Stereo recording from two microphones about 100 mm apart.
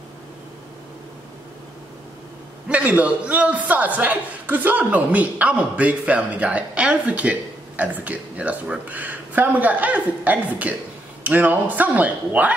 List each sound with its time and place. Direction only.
2.7 s a man's voice: 15° right (ahead or behind)